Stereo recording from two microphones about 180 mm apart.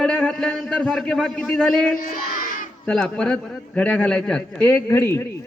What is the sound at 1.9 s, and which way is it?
Child singing, 50° left (ahead or behind).